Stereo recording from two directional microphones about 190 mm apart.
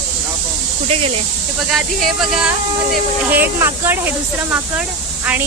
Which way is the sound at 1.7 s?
Centre (ahead or behind).